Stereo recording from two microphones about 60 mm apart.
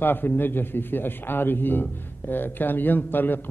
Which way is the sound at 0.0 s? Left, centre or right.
Left.